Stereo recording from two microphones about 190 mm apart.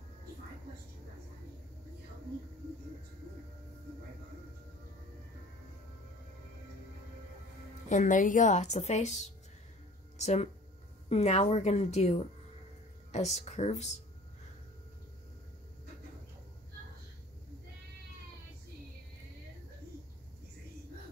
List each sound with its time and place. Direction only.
7.9 s a woman's voice: 40° left (ahead or behind)